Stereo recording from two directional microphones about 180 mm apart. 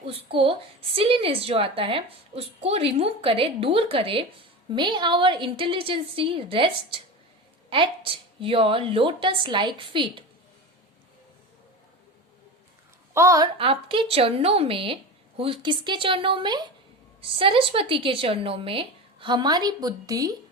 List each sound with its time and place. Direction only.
0.0 s a woman's voice: 30° right (ahead or behind)
13.1 s a woman's voice: 15° right (ahead or behind)
13.6 s a woman's voice: 30° right (ahead or behind)